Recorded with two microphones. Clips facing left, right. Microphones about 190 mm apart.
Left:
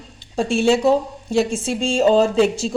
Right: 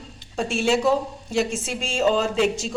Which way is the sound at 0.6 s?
30° left (ahead or behind).